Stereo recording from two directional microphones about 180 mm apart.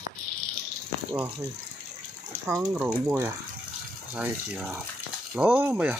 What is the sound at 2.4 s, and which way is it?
Speech, 15° right (ahead or behind).